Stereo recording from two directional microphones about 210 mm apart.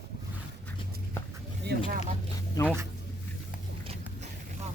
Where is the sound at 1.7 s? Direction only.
50° right (ahead or behind).